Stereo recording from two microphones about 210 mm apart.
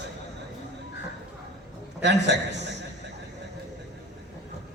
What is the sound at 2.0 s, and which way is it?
Speech, 55° right (ahead or behind).